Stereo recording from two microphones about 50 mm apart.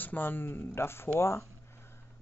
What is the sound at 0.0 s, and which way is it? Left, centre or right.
Speech, left.